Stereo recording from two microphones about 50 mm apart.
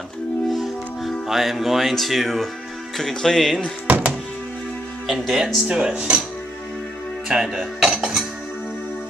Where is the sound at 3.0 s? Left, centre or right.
Centre.